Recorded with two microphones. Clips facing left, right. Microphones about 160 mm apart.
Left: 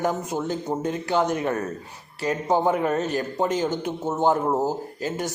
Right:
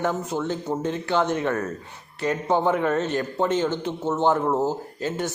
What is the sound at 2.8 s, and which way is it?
A man's voice, 15° left (ahead or behind).